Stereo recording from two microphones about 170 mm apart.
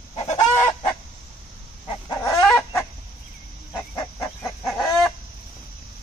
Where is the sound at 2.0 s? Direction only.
20° left (ahead or behind).